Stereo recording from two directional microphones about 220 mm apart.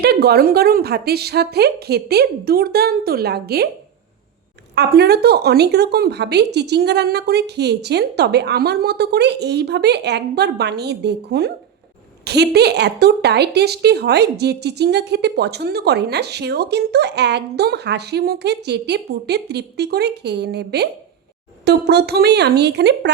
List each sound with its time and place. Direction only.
0.0 s speech: 45° right (ahead or behind)
4.7 s speech: 45° right (ahead or behind)